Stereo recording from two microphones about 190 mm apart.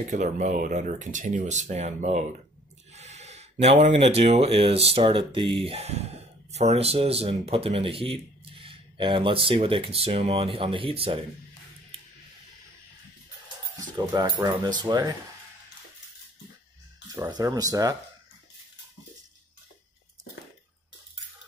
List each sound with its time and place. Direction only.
0.1 s speech: 40° right (ahead or behind)
13.7 s speech: 20° right (ahead or behind)
17.1 s speech: 20° right (ahead or behind)